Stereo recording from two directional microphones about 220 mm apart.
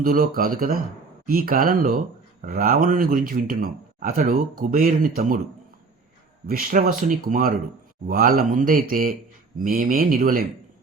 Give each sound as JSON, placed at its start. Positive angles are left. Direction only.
{"t": 0.0, "sound": "speech", "side_deg": -40}
{"t": 6.5, "sound": "speech", "side_deg": -40}